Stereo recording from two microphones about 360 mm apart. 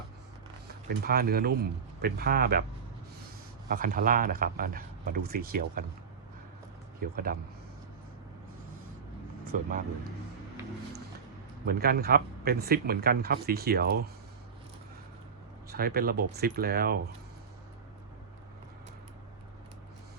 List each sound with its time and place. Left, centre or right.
0.9 s speech: right
3.7 s speech: right
7.0 s speech: right
9.5 s speech: right
11.6 s speech: right
15.7 s speech: right